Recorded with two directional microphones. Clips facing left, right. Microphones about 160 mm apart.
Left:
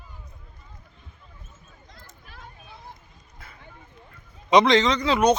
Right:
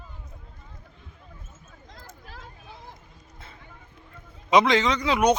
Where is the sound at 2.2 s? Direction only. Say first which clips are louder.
Right 1 dB; 90° right.